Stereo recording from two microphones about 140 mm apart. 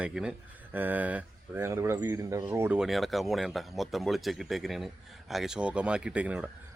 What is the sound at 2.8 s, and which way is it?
Speech, centre (ahead or behind).